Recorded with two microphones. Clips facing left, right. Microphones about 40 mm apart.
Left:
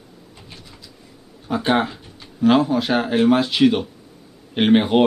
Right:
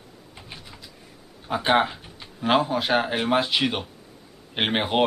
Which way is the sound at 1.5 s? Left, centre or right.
Centre.